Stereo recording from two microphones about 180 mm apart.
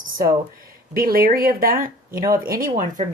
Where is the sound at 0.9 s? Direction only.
55° right (ahead or behind).